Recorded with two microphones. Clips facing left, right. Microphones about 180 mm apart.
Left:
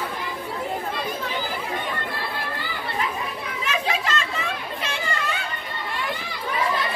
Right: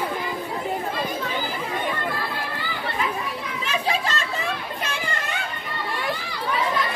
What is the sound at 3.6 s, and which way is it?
Children playing, 30° right (ahead or behind).